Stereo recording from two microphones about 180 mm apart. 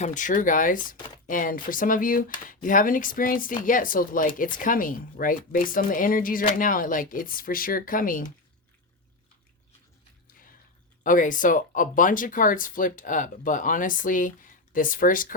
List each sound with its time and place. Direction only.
0.0 s speech: 45° left (ahead or behind)
0.9 s speech: 25° left (ahead or behind)
1.3 s speech: 50° left (ahead or behind)
11.0 s speech: 45° left (ahead or behind)